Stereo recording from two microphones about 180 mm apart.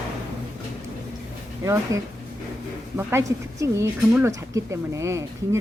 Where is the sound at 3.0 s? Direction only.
15° right (ahead or behind).